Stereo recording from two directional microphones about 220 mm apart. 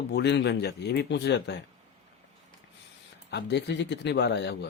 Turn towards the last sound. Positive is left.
turn(degrees=50)  # may be behind; listen again after turning